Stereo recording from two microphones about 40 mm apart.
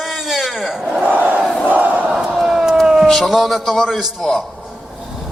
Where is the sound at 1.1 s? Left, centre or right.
Right.